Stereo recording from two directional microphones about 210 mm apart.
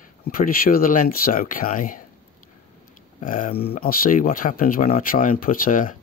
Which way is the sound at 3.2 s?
40° left (ahead or behind).